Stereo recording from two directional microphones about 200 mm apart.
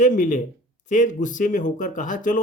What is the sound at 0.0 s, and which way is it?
Speech, 40° left (ahead or behind).